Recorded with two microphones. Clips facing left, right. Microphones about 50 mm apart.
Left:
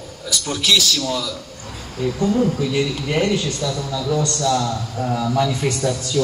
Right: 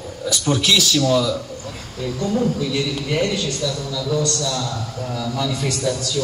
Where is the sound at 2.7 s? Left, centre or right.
Left.